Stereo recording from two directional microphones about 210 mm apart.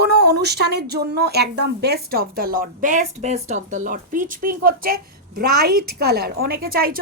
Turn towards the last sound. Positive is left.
turn(degrees=-45)  # may be behind; listen again after turning